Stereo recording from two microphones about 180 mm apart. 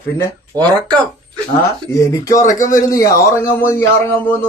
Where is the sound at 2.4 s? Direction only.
45° left (ahead or behind).